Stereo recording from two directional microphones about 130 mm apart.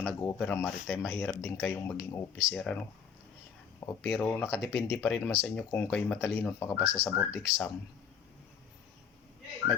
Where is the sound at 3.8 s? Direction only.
20° left (ahead or behind).